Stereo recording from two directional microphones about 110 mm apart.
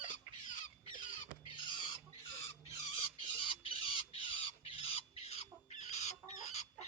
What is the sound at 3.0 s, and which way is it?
Chicken, 55° left (ahead or behind).